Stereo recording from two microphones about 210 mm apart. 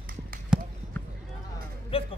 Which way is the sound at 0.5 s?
5° right (ahead or behind).